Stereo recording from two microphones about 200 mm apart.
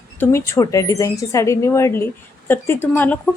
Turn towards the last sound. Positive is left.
turn(degrees=10)  # may be behind; listen again after turning